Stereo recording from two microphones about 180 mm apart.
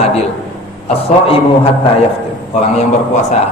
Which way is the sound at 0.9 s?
35° left (ahead or behind).